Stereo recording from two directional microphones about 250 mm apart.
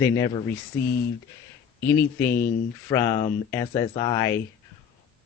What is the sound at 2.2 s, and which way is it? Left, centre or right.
Speech, centre.